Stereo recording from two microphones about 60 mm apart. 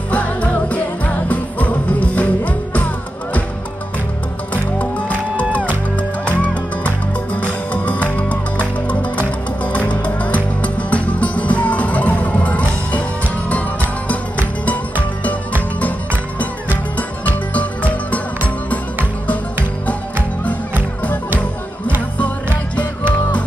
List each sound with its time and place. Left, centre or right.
0.1 s music: left
6.2 s music: left
9.7 s music: left